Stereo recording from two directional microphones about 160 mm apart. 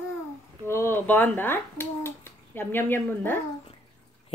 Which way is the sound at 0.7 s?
15° left (ahead or behind).